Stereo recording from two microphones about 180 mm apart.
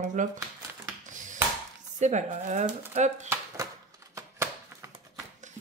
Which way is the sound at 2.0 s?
45° right (ahead or behind).